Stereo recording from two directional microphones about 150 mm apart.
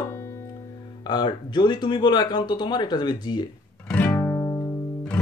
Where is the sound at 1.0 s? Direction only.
30° left (ahead or behind).